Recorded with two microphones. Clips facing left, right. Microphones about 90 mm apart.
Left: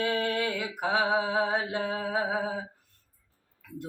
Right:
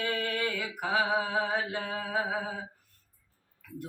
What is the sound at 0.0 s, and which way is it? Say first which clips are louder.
Mantra: left 3 dB; 25° left (ahead or behind).